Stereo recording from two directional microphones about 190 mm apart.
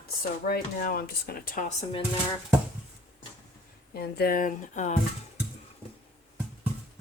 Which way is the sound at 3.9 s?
55° left (ahead or behind).